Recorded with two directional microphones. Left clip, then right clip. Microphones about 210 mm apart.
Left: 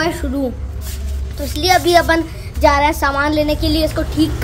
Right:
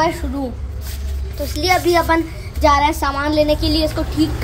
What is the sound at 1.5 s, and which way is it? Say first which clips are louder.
A woman's voice: left 3 dB; 5° left (ahead or behind).